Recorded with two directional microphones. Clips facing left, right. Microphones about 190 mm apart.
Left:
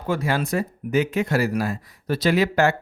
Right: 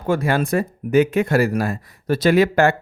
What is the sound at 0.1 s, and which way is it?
Speech, 50° right (ahead or behind).